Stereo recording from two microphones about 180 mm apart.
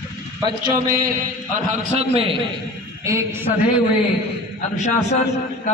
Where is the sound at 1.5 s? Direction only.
45° right (ahead or behind).